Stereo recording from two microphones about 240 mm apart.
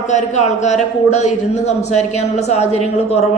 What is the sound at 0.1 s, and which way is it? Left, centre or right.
A man's voice, left.